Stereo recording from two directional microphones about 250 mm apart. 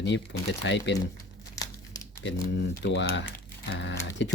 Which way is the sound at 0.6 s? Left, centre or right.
Left.